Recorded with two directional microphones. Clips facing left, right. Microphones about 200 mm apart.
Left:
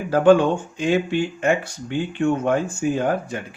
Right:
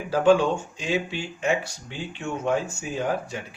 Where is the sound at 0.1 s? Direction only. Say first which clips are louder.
Left 4 dB; 55° left (ahead or behind).